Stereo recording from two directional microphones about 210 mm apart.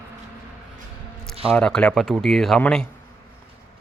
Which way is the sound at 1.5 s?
5° left (ahead or behind).